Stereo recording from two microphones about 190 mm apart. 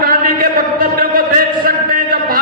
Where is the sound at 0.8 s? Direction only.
50° right (ahead or behind).